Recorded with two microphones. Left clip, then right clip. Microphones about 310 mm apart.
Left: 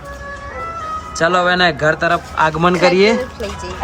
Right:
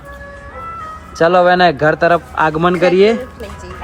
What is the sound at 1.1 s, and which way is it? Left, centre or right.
Speech, centre.